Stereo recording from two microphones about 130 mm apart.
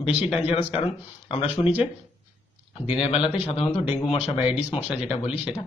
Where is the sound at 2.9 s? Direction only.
50° left (ahead or behind).